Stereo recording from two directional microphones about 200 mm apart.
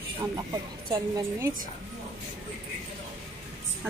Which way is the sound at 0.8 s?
20° right (ahead or behind).